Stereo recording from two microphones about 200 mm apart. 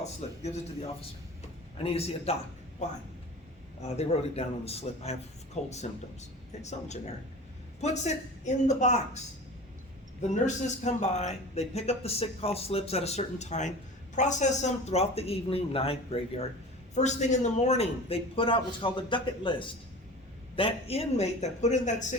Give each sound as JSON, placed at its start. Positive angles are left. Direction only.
{"t": 0.0, "sound": "a man's voice", "side_deg": 30}
{"t": 1.4, "sound": "a sound", "side_deg": 30}
{"t": 3.8, "sound": "a man's voice", "side_deg": 35}